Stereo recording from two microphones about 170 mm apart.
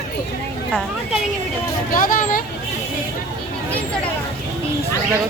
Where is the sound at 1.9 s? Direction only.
55° left (ahead or behind).